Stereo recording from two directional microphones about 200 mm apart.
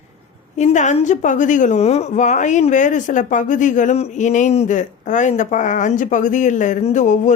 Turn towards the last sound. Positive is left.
turn(degrees=35)  # may be behind; listen again after turning